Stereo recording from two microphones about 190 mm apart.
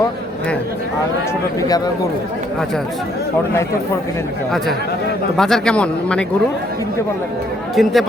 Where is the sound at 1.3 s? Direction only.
20° left (ahead or behind).